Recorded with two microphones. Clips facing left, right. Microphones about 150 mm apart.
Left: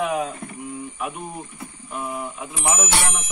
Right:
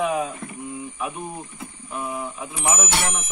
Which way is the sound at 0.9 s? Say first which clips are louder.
Even; 5° left (ahead or behind).